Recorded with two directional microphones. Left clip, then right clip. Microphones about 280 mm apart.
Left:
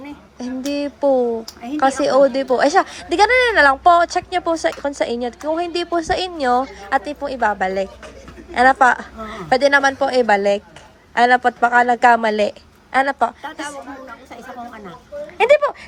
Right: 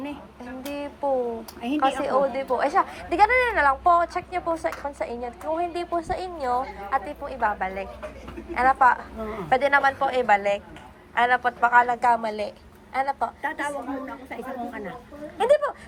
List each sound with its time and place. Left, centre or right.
0.7 s a woman's voice: left
12.2 s a woman's voice: left
15.4 s speech: centre